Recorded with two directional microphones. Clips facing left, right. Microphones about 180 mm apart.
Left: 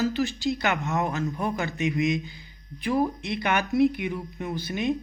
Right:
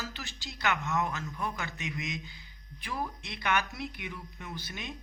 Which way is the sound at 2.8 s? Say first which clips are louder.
Left 12 dB; 50° left (ahead or behind).